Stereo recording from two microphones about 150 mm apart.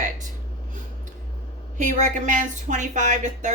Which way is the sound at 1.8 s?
55° right (ahead or behind).